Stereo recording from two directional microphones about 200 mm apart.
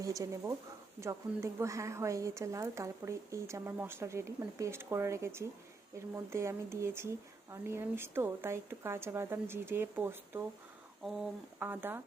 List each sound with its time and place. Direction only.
0.0 s a woman's voice: 15° right (ahead or behind)